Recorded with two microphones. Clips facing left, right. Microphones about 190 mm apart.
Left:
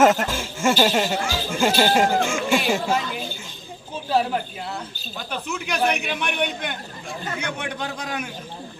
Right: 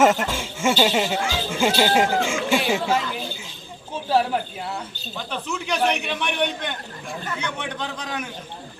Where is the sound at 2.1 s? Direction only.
50° left (ahead or behind).